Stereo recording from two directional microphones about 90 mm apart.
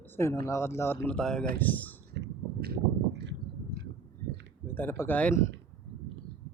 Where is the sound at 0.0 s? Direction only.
25° left (ahead or behind).